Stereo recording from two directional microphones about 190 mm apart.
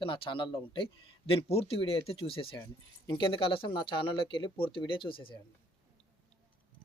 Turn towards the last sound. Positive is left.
turn(degrees=25)  # may be behind; listen again after turning